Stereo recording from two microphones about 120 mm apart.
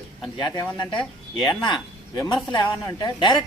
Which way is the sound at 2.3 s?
40° left (ahead or behind).